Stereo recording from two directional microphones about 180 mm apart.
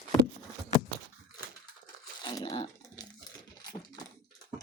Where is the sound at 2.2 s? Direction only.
25° left (ahead or behind).